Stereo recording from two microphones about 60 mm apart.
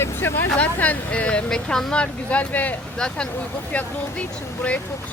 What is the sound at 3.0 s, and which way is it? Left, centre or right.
Speech, centre.